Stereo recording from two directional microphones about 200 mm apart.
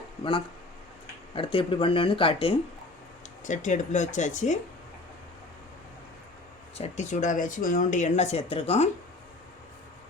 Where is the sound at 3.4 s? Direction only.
40° left (ahead or behind).